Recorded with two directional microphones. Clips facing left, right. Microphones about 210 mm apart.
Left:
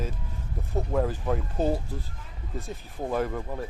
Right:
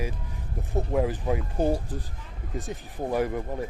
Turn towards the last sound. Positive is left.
turn(degrees=-15)  # may be behind; listen again after turning